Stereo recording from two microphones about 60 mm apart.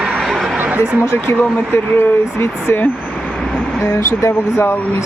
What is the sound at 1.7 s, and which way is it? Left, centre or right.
Speech, left.